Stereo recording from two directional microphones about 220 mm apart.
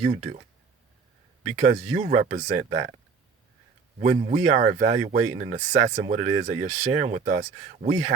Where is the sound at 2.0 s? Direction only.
30° right (ahead or behind).